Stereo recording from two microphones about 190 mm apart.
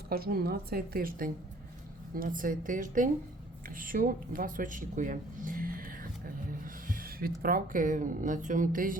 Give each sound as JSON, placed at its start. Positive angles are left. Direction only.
{"t": 0.1, "sound": "speech", "side_deg": -55}